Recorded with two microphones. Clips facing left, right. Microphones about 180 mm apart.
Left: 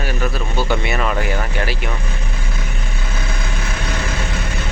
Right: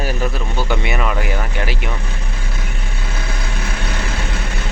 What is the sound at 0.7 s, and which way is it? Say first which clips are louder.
Speech: even; 15° right (ahead or behind).